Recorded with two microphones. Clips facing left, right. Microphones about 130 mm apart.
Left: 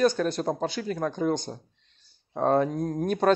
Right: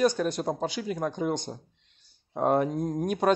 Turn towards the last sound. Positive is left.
turn(degrees=-10)  # may be behind; listen again after turning